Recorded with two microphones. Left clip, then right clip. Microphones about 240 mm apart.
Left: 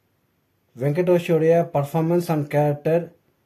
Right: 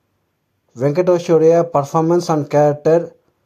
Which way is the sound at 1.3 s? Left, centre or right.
Right.